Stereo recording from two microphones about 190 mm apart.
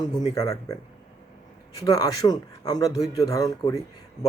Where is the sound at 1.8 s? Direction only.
20° left (ahead or behind).